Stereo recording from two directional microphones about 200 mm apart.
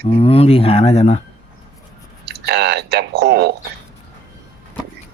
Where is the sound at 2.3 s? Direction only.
55° right (ahead or behind).